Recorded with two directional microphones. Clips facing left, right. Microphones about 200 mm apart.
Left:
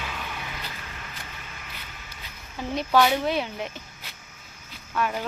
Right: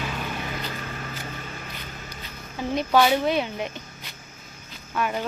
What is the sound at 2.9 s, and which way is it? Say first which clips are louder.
Speech: right 1 dB; centre (ahead or behind).